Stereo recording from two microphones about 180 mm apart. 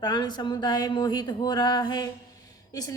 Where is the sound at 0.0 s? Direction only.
25° left (ahead or behind).